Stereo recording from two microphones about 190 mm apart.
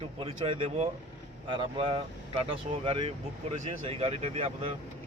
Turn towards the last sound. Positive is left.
turn(degrees=-30)  # may be behind; listen again after turning